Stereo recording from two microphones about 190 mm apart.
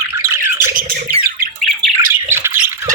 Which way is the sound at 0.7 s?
45° right (ahead or behind).